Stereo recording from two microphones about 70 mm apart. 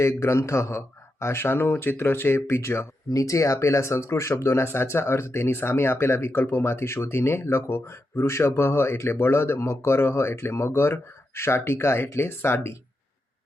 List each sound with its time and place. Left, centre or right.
0.0 s a man's voice: left